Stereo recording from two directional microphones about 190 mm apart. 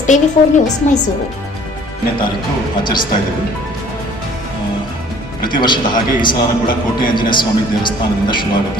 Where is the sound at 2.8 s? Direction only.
25° left (ahead or behind).